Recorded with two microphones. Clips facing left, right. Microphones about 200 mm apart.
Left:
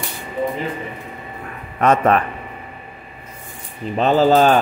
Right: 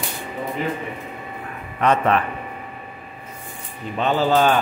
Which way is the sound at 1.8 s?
45° left (ahead or behind).